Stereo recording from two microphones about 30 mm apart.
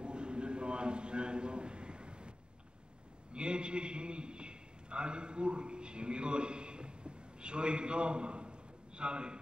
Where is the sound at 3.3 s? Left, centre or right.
Right.